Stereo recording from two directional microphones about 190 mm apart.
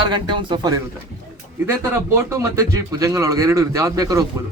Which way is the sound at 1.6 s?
15° right (ahead or behind).